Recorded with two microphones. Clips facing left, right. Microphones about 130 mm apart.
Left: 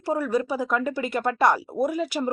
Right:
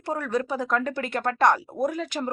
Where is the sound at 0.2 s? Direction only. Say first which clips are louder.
Left 2 dB; 5° left (ahead or behind).